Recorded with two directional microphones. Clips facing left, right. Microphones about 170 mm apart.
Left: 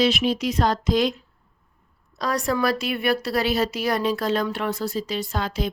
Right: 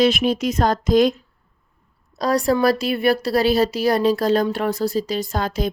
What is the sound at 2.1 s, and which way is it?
Speech, 35° right (ahead or behind).